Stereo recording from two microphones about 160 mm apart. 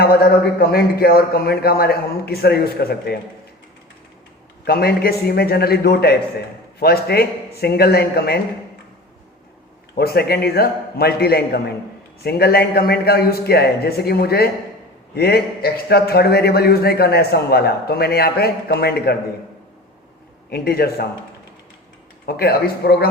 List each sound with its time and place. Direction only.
0.6 s a man's voice: 70° left (ahead or behind)
4.6 s a man's voice: 75° left (ahead or behind)
9.9 s a man's voice: 75° left (ahead or behind)
20.5 s a man's voice: 75° left (ahead or behind)
22.3 s a man's voice: 75° left (ahead or behind)